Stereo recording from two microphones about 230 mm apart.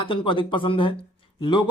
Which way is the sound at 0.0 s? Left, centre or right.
Left.